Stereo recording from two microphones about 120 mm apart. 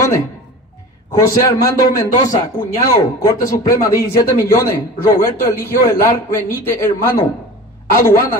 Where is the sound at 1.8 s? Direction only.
30° left (ahead or behind).